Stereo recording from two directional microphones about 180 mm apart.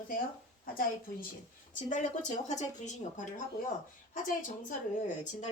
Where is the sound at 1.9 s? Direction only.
40° left (ahead or behind).